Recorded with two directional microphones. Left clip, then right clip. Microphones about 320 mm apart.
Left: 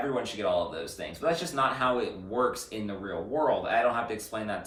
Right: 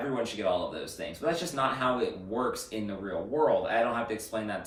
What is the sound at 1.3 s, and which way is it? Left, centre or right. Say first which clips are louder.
Speech: left 2 dB; centre.